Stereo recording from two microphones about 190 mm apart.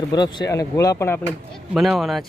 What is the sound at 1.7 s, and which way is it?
Speech, centre (ahead or behind).